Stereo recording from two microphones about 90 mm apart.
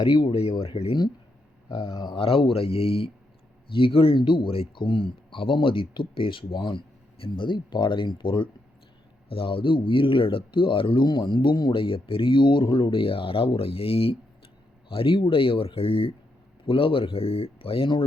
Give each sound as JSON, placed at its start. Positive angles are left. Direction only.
{"t": 0.0, "sound": "speech", "side_deg": 60}
{"t": 1.7, "sound": "speech", "side_deg": 55}
{"t": 2.1, "sound": "speech", "side_deg": 90}
{"t": 9.3, "sound": "speech", "side_deg": 80}
{"t": 12.9, "sound": "speech", "side_deg": 90}